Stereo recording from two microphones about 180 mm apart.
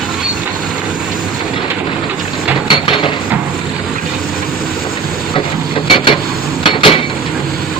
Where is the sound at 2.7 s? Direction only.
30° left (ahead or behind).